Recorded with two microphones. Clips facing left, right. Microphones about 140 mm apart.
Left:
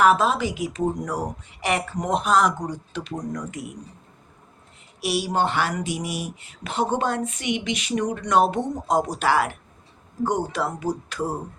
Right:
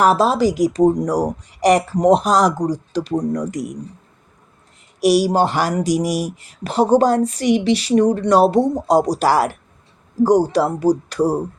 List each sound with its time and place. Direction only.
0.0 s speech: 35° right (ahead or behind)
4.9 s speech: 40° right (ahead or behind)